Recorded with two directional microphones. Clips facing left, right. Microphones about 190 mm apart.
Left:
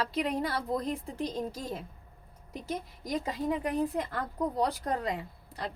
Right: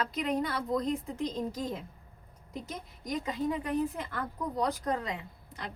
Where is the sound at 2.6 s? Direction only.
30° left (ahead or behind).